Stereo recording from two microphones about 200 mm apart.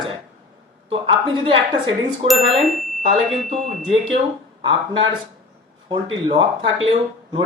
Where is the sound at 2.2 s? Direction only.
30° right (ahead or behind).